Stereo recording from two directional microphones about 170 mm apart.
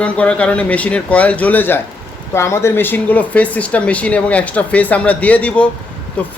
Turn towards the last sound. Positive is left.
turn(degrees=5)  # may be behind; listen again after turning